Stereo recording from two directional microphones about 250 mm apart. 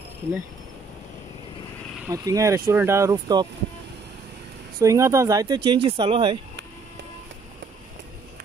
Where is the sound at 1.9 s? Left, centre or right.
Centre.